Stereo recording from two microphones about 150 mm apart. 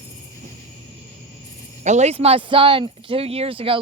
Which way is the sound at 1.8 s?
50° right (ahead or behind).